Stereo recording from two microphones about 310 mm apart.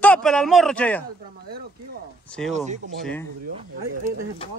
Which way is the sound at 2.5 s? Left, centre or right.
Right.